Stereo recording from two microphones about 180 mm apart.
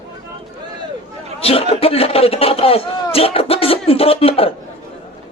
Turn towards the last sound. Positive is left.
turn(degrees=30)  # may be behind; listen again after turning